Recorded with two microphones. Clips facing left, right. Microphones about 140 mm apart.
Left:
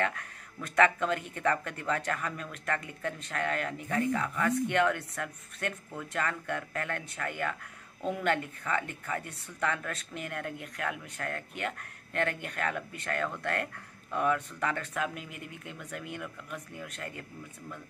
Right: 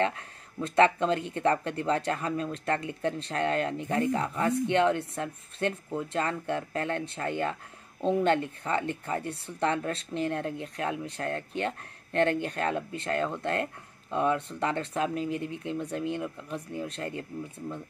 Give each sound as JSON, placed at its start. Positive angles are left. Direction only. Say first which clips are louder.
{"t": 0.0, "sound": "speech", "louder": "right 4 dB", "side_deg": -25}